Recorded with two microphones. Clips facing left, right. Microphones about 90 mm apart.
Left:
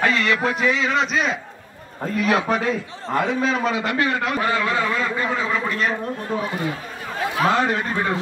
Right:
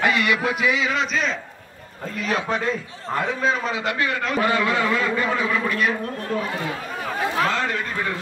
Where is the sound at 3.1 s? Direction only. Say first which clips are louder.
Left 2 dB; 60° left (ahead or behind).